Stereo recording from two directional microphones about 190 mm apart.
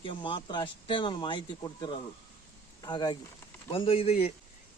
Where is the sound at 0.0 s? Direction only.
25° left (ahead or behind).